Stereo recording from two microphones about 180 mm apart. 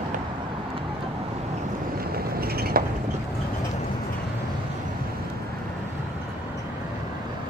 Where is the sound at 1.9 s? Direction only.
55° right (ahead or behind).